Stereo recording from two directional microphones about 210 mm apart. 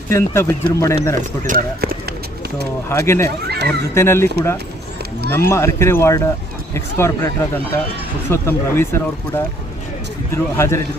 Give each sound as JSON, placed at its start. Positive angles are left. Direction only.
{"t": 0.1, "sound": "speech", "side_deg": 10}
{"t": 1.5, "sound": "speech", "side_deg": -45}
{"t": 2.9, "sound": "speech", "side_deg": 15}
{"t": 3.4, "sound": "a sound", "side_deg": -50}
{"t": 3.9, "sound": "speech", "side_deg": 10}
{"t": 5.3, "sound": "speech", "side_deg": 10}